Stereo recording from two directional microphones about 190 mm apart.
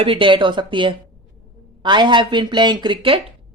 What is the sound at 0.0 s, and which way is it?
Speech, 30° right (ahead or behind).